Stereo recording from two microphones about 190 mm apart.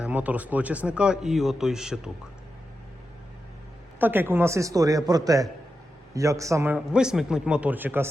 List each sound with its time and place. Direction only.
0.0 s speech: 10° right (ahead or behind)
4.0 s a man's voice: 10° right (ahead or behind)